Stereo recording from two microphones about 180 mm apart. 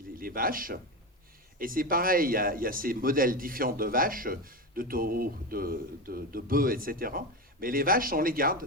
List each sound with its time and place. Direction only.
0.2 s a man's voice: 50° right (ahead or behind)